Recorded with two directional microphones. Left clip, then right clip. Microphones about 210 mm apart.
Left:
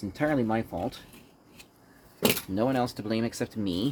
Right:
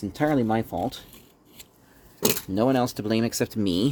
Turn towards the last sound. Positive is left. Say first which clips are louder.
# right 6 dB
turn(degrees=-55)  # may be behind; listen again after turning